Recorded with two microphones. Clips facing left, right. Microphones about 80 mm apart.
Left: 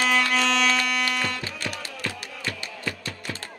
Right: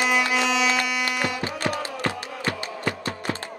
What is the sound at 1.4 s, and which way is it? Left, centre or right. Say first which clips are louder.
Music: right 6 dB; right.